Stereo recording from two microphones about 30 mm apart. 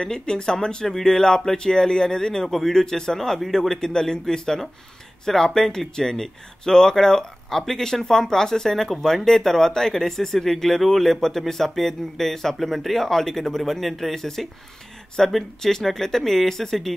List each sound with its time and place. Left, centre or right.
0.1 s speech: left
0.8 s speech: centre
2.4 s speech: centre
2.7 s speech: centre
3.5 s speech: centre